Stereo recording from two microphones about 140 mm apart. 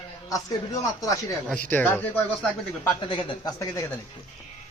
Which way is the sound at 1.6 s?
10° left (ahead or behind).